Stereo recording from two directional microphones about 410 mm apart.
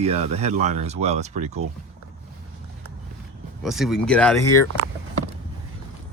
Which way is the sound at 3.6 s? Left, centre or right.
Centre.